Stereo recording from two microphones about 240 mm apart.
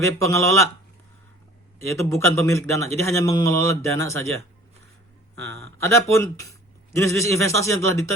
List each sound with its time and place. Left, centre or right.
0.0 s speech: centre
1.9 s speech: centre
5.4 s speech: right
5.7 s speech: centre